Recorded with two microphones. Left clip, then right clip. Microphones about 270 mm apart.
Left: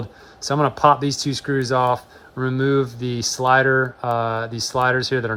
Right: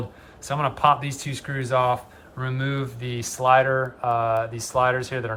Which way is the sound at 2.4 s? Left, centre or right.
Centre.